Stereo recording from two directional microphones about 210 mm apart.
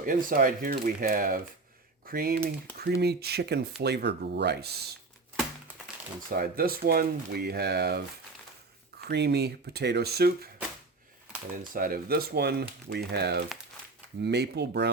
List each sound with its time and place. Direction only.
0.0 s speech: 40° right (ahead or behind)
6.3 s speech: 45° right (ahead or behind)
11.7 s speech: 45° right (ahead or behind)